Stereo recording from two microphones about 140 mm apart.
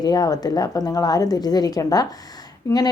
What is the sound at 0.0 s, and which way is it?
A woman's voice, 30° left (ahead or behind).